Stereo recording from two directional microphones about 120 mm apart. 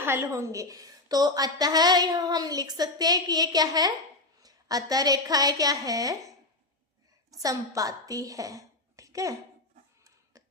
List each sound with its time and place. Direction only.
0.0 s a woman's voice: 20° right (ahead or behind)
7.4 s a woman's voice: 30° right (ahead or behind)